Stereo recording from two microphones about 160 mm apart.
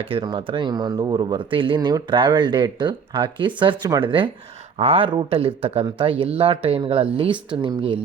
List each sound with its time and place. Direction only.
0.1 s speech: 30° right (ahead or behind)